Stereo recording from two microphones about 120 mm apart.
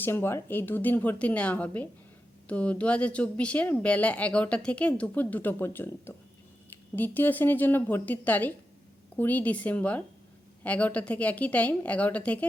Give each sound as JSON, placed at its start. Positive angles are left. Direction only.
{"t": 0.0, "sound": "a woman's voice", "side_deg": 20}